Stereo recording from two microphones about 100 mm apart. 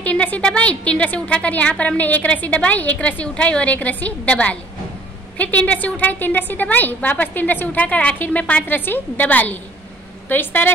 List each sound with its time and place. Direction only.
0.0 s a woman's voice: 15° left (ahead or behind)